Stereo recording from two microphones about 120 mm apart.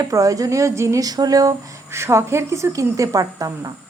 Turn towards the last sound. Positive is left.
turn(degrees=-30)  # may be behind; listen again after turning